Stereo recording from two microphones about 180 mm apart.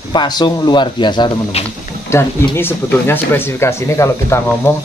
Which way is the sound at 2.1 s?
15° left (ahead or behind).